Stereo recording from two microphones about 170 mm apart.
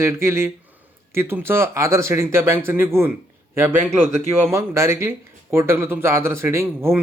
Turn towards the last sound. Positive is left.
turn(degrees=-15)  # may be behind; listen again after turning